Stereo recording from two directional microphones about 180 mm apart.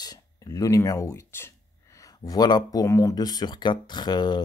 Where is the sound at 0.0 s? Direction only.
20° left (ahead or behind).